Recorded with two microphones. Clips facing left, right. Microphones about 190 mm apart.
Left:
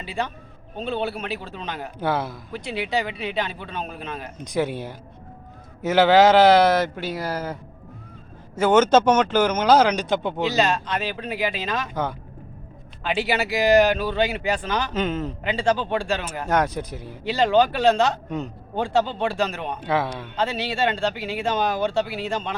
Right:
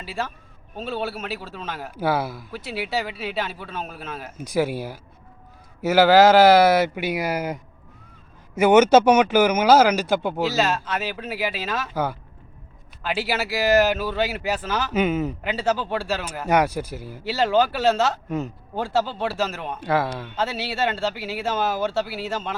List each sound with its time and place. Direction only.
0.0 s a man's voice: centre (ahead or behind)